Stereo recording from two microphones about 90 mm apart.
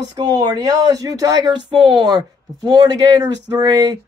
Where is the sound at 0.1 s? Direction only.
50° right (ahead or behind).